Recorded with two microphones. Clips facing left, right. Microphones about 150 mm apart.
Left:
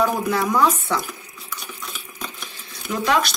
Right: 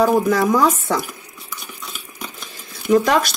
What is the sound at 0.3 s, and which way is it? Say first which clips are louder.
Speech: right 3 dB; 40° right (ahead or behind).